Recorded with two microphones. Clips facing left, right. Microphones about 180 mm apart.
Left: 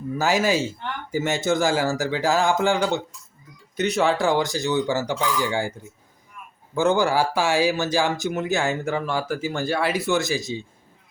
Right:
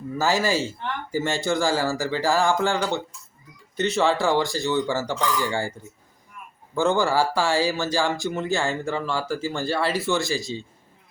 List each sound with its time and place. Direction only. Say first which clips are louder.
0.2 s a man's voice: left 1 dB; 20° left (ahead or behind)
4.0 s speech: even; 15° left (ahead or behind)
6.7 s speech: left 1 dB; 15° left (ahead or behind)